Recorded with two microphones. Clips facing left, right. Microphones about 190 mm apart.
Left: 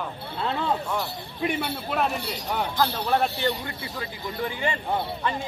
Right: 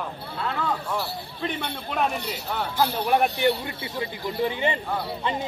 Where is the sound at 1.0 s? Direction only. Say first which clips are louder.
Left 1 dB; 15° left (ahead or behind).